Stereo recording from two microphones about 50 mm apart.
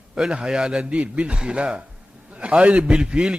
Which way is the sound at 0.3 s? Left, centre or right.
Centre.